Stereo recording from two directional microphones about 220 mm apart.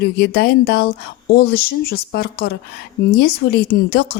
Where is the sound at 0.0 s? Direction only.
45° left (ahead or behind).